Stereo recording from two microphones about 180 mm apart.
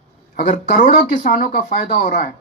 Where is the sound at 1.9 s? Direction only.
40° left (ahead or behind).